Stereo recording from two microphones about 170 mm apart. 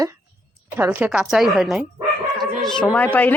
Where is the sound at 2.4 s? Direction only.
5° left (ahead or behind).